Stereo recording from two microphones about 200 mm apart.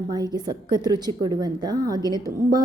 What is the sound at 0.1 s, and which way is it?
A woman's voice, 20° right (ahead or behind).